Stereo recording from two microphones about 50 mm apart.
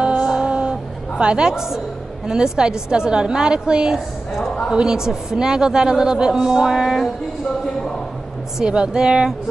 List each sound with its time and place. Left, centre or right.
0.0 s a sound: centre
1.2 s a man's voice: centre
8.5 s a man's voice: centre